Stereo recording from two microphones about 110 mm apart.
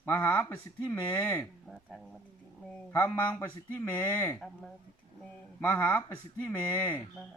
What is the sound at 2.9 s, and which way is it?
Speech, 20° left (ahead or behind).